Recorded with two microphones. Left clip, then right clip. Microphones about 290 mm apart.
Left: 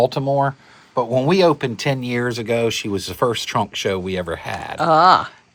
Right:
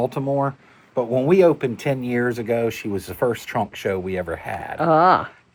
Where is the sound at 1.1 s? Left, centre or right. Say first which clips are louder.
Even; left.